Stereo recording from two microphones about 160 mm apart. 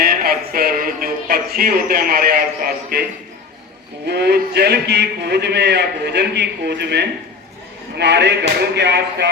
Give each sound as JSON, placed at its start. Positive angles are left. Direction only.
{"t": 0.0, "sound": "music", "side_deg": -70}
{"t": 4.0, "sound": "a man's voice", "side_deg": -90}